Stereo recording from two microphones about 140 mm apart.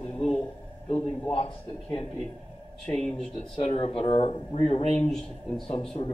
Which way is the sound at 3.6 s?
50° left (ahead or behind).